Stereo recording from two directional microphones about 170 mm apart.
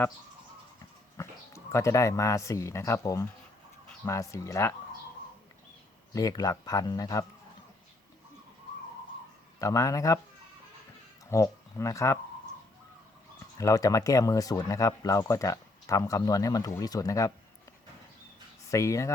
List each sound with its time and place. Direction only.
1.1 s speech: 15° left (ahead or behind)
6.1 s speech: 20° left (ahead or behind)
9.6 s speech: 20° left (ahead or behind)
11.3 s speech: 15° left (ahead or behind)
13.6 s speech: 20° left (ahead or behind)
18.7 s speech: 20° left (ahead or behind)